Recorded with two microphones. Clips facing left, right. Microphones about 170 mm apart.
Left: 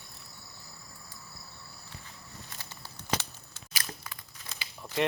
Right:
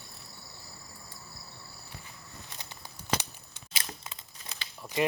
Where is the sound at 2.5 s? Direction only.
15° right (ahead or behind).